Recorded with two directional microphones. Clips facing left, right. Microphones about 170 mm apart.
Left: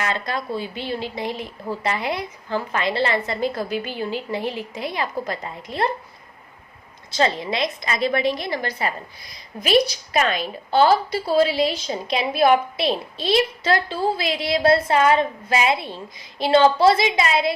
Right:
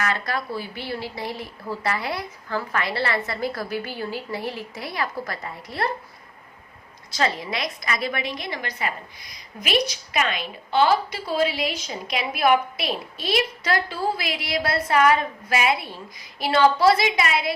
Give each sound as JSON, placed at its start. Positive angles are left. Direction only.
{"t": 0.0, "sound": "a woman's voice", "side_deg": 20}
{"t": 7.1, "sound": "a woman's voice", "side_deg": 25}